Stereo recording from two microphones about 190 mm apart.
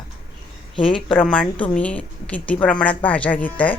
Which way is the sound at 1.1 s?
5° left (ahead or behind).